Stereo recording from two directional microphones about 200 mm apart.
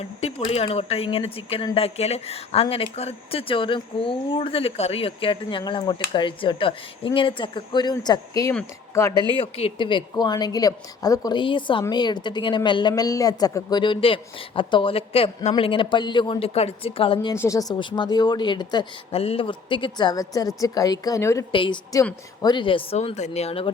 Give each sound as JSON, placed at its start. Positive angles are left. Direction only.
{"t": 0.2, "sound": "speech", "side_deg": 30}
{"t": 9.3, "sound": "speech", "side_deg": 30}
{"t": 17.3, "sound": "speech", "side_deg": 15}